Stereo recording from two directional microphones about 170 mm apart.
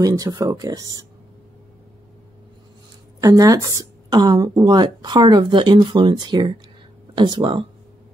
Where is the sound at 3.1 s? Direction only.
20° right (ahead or behind).